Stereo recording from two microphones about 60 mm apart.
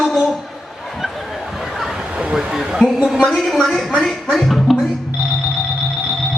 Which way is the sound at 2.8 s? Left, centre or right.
Centre.